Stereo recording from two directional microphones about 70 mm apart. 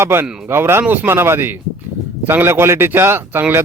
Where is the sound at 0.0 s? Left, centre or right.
Right.